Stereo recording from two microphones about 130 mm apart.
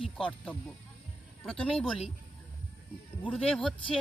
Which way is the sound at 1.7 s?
45° left (ahead or behind).